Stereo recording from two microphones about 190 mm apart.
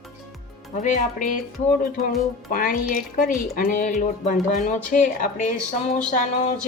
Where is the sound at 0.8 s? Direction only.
40° left (ahead or behind).